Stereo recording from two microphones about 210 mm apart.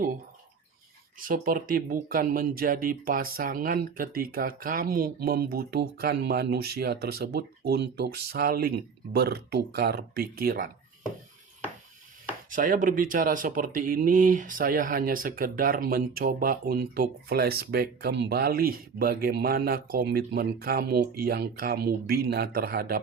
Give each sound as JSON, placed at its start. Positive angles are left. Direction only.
{"t": 1.2, "sound": "speech", "side_deg": -40}
{"t": 12.5, "sound": "speech", "side_deg": -40}